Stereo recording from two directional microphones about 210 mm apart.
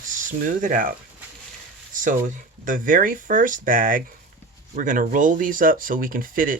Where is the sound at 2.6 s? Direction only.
40° right (ahead or behind).